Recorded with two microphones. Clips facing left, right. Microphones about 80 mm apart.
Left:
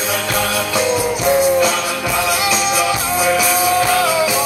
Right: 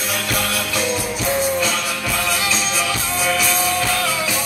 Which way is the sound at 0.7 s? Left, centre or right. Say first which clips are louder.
Left 7 dB; centre.